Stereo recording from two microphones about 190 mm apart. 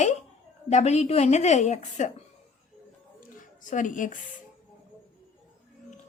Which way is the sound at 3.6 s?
40° left (ahead or behind).